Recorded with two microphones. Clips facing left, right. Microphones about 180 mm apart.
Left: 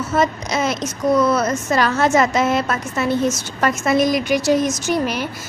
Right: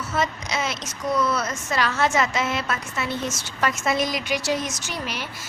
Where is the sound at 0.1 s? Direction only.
45° left (ahead or behind).